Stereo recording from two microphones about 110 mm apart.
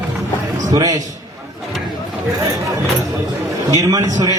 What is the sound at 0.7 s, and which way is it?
Speech, 35° right (ahead or behind).